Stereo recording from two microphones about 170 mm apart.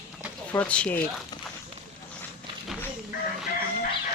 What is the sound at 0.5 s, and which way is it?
Speech, 10° left (ahead or behind).